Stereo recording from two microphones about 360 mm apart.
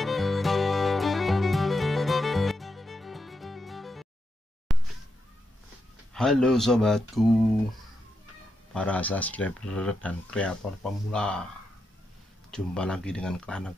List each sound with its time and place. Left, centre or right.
0.0 s music: centre
4.7 s a sound: centre
6.1 s speech: centre
8.7 s speech: centre
12.4 s speech: centre